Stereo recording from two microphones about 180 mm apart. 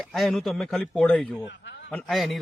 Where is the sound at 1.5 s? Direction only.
75° left (ahead or behind).